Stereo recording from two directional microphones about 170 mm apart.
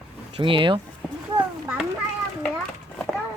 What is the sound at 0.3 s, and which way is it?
Speech, 30° right (ahead or behind).